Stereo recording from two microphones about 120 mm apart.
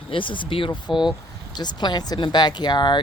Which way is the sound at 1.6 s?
35° left (ahead or behind).